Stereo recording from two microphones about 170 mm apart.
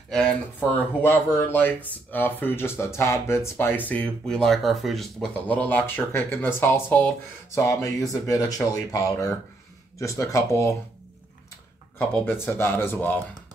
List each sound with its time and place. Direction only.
0.1 s speech: 5° left (ahead or behind)
12.4 s speech: 15° left (ahead or behind)